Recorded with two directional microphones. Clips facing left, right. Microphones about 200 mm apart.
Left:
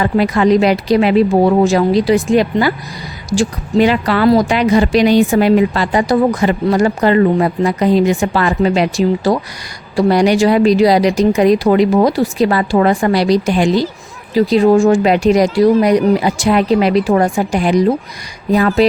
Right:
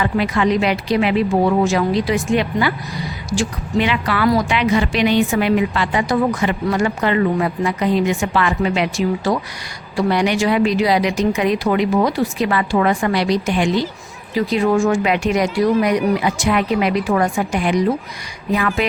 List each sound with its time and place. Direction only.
0.0 s speech: 40° left (ahead or behind)